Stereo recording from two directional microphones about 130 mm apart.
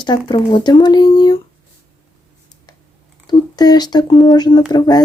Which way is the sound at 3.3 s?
30° left (ahead or behind).